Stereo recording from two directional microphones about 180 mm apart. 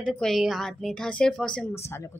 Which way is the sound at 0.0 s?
5° left (ahead or behind).